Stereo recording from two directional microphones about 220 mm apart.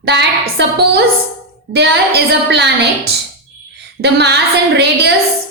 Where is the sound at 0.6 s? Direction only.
50° right (ahead or behind).